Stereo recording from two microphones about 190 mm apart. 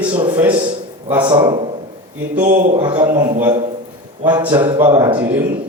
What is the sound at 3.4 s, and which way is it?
Speech, 10° right (ahead or behind).